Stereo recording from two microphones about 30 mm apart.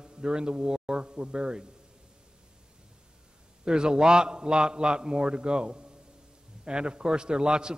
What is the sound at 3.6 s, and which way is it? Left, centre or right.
A man's voice, right.